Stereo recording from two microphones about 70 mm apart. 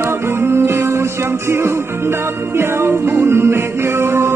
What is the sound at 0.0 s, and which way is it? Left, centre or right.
Music, right.